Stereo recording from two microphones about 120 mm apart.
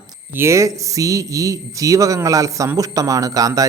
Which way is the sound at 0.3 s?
25° right (ahead or behind).